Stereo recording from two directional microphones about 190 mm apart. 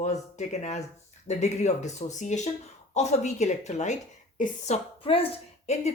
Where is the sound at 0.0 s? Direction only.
35° left (ahead or behind).